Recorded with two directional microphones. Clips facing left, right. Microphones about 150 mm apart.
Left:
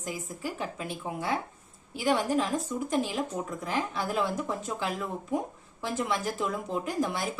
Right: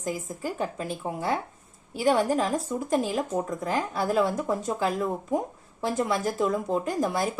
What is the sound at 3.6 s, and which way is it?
A woman's voice, 45° right (ahead or behind).